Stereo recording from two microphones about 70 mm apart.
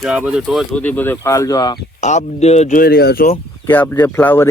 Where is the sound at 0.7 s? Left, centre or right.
Left.